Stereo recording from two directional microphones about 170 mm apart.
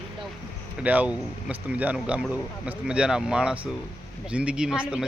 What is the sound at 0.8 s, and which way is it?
Speech, 10° right (ahead or behind).